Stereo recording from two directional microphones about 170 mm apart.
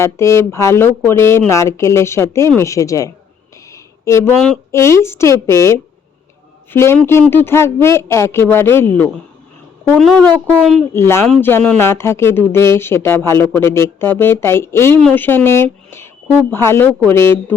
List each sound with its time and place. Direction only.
0.0 s speech: 15° left (ahead or behind)
3.7 s a sound: 15° left (ahead or behind)
4.7 s speech: 15° left (ahead or behind)
10.9 s speech: 15° left (ahead or behind)